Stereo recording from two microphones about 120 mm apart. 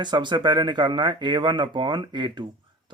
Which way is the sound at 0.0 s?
40° right (ahead or behind).